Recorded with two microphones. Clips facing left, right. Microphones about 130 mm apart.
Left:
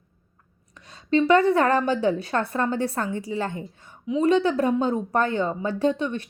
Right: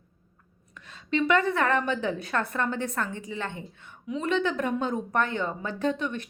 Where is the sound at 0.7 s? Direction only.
35° left (ahead or behind).